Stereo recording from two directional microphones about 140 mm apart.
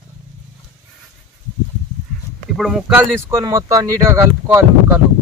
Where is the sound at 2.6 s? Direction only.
5° right (ahead or behind).